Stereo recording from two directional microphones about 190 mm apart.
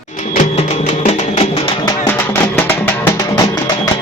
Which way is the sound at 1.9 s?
10° left (ahead or behind).